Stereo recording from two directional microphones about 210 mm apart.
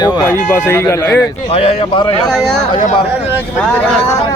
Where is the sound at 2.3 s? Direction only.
Centre (ahead or behind).